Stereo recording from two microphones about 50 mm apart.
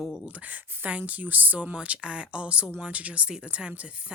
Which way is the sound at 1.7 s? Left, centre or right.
Right.